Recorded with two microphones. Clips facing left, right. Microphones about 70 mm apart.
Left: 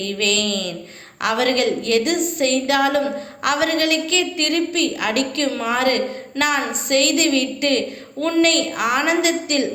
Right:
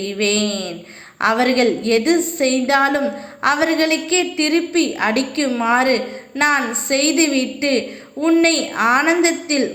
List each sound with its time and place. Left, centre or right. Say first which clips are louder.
0.0 s a woman's voice: right 3 dB; right